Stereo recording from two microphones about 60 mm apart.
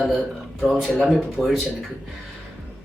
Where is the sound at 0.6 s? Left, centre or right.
Centre.